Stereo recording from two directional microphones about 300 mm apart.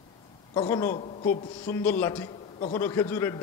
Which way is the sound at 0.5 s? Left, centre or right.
Centre.